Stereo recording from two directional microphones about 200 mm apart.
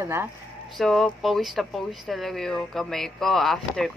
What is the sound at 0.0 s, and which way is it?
Speech, 10° right (ahead or behind).